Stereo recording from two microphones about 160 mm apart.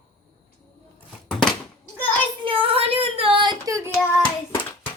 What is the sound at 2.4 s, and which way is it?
Child singing, 35° right (ahead or behind).